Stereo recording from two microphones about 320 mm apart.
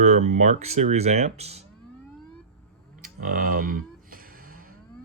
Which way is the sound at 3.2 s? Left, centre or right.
Right.